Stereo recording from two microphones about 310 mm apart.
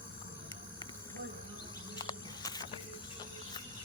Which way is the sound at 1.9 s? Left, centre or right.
Centre.